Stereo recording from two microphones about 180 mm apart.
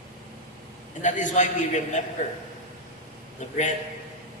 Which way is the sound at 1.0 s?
45° left (ahead or behind).